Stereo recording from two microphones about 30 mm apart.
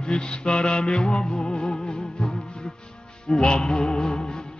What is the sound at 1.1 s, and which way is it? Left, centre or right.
Music, centre.